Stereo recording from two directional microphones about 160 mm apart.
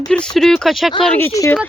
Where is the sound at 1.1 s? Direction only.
15° left (ahead or behind).